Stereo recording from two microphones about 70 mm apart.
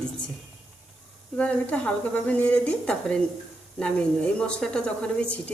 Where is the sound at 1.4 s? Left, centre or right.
Centre.